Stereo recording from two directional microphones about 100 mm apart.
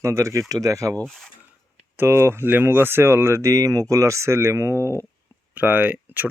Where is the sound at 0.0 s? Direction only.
30° right (ahead or behind).